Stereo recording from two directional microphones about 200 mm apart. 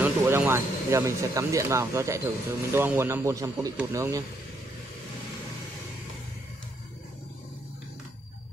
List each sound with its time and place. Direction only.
0.0 s speech: 10° right (ahead or behind)